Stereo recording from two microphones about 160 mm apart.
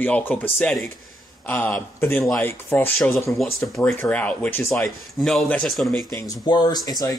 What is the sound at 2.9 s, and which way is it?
Speech, centre (ahead or behind).